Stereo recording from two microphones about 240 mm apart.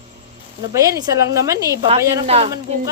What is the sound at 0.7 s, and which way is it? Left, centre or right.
A woman's voice, centre.